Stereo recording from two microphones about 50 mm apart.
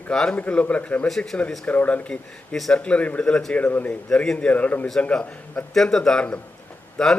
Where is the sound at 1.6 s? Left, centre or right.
Left.